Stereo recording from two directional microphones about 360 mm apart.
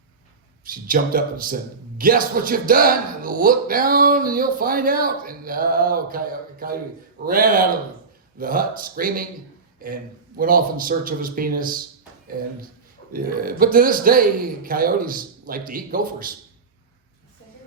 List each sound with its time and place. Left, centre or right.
0.6 s speech: right
13.1 s speech: right